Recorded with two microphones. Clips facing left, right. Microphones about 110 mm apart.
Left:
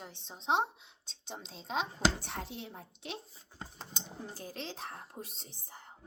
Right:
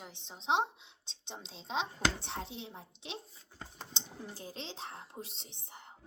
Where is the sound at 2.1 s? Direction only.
25° right (ahead or behind).